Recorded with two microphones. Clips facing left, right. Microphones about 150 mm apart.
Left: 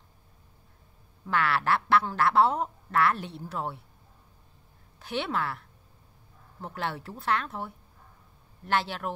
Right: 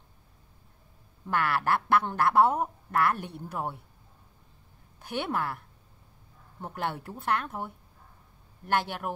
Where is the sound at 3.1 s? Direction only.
50° right (ahead or behind).